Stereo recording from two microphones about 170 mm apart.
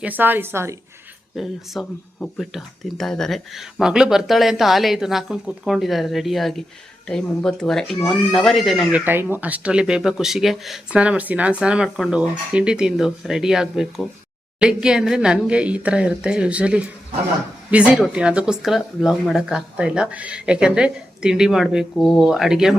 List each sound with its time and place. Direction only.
0.0 s speech: 10° right (ahead or behind)
1.4 s speech: centre (ahead or behind)